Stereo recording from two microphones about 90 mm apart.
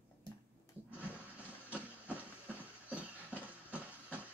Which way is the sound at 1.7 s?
15° right (ahead or behind).